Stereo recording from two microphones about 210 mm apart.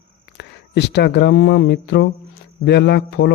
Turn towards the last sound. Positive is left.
turn(degrees=55)  # may be behind; listen again after turning